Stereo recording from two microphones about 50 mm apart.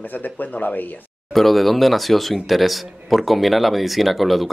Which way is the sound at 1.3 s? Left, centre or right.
Centre.